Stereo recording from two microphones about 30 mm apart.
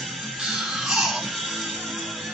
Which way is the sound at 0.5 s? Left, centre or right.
Centre.